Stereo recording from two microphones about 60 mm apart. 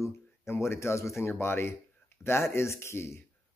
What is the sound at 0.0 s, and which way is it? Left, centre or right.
Speech, left.